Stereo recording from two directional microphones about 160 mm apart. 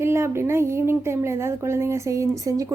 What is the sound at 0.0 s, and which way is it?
Speech, 15° right (ahead or behind).